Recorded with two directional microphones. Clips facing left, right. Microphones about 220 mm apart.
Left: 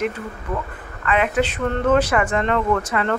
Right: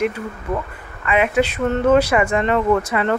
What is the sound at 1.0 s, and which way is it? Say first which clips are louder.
Speech: right 2 dB; 10° right (ahead or behind).